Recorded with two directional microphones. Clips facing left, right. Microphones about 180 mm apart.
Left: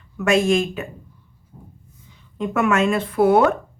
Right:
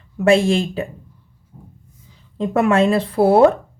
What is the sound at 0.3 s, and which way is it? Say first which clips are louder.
Speech: right 3 dB; 30° right (ahead or behind).